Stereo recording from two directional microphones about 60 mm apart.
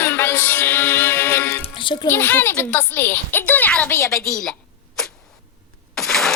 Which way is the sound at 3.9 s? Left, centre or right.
Left.